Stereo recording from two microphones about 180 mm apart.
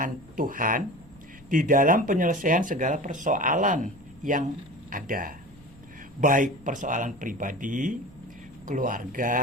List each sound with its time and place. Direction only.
0.0 s speech: 50° right (ahead or behind)